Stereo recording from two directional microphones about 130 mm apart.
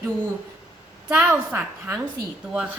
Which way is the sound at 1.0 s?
10° right (ahead or behind).